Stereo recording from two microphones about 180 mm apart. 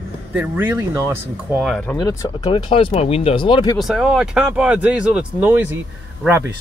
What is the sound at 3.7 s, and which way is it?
Speech, centre (ahead or behind).